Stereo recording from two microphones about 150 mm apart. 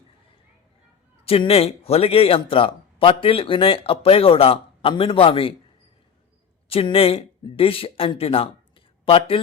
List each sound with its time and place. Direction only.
1.2 s speech: 40° left (ahead or behind)
6.7 s speech: 40° left (ahead or behind)